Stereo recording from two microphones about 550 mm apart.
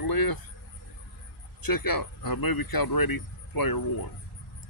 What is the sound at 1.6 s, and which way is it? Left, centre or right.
Speech, left.